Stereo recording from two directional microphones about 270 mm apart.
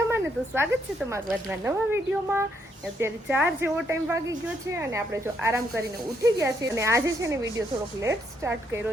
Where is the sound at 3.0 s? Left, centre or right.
Centre.